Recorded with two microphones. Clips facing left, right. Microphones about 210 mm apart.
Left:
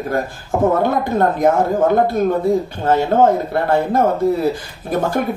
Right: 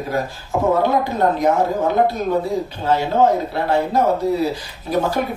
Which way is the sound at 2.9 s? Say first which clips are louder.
Left 3 dB; 55° left (ahead or behind).